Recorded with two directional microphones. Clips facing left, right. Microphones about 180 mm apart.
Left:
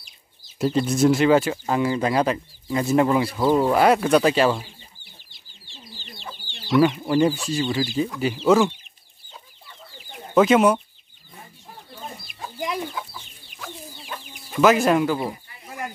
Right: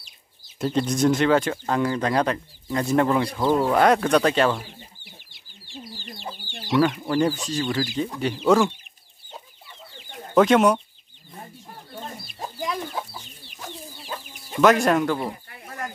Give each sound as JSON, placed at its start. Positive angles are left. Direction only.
{"t": 0.6, "sound": "speech", "side_deg": 5}
{"t": 7.1, "sound": "speech", "side_deg": 15}
{"t": 10.0, "sound": "chicken", "side_deg": 10}
{"t": 12.5, "sound": "chicken", "side_deg": 15}
{"t": 12.9, "sound": "chicken", "side_deg": -35}
{"t": 14.6, "sound": "speech", "side_deg": 5}